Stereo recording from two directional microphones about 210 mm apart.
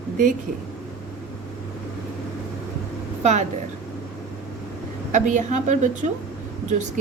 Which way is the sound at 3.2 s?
35° right (ahead or behind).